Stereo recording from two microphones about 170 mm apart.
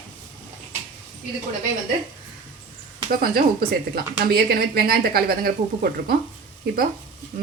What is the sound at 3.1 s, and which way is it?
A woman's voice, 60° right (ahead or behind).